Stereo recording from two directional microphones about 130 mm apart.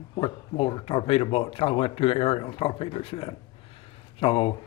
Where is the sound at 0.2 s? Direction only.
45° left (ahead or behind).